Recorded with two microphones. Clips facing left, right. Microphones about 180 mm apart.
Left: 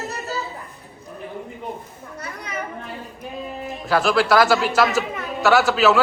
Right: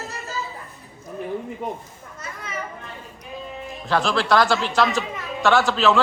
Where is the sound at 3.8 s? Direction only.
5° left (ahead or behind).